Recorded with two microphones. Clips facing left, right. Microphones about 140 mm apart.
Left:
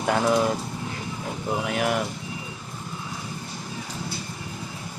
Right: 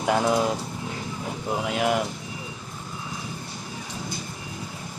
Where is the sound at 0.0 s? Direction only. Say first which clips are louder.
Even; 15° right (ahead or behind).